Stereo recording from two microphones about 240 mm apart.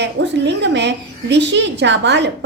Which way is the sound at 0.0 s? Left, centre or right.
Right.